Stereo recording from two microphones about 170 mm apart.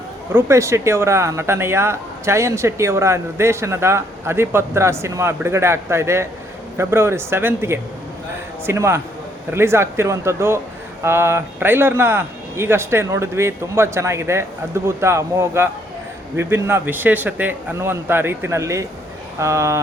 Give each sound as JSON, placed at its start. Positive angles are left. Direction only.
{"t": 0.3, "sound": "speech", "side_deg": -15}